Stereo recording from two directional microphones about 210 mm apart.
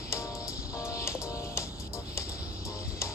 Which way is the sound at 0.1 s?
15° left (ahead or behind).